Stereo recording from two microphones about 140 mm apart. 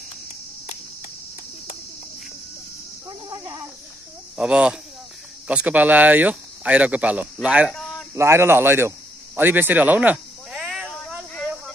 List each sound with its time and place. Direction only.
3.1 s a sound: 30° right (ahead or behind)
4.4 s speech: 5° right (ahead or behind)
8.1 s a man's voice: 20° right (ahead or behind); by 10.9 s 5° right (ahead or behind)